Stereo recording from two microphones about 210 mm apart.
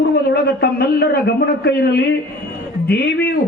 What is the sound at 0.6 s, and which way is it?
A man's voice, 50° left (ahead or behind).